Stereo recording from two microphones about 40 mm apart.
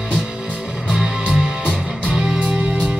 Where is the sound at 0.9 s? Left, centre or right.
Centre.